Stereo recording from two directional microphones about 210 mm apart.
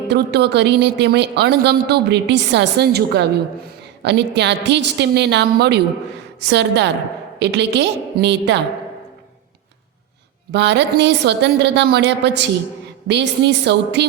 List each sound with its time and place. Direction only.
0.1 s a woman's voice: 55° right (ahead or behind)
10.5 s a woman's voice: 55° right (ahead or behind)